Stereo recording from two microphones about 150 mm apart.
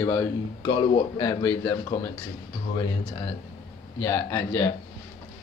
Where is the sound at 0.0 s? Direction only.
25° left (ahead or behind).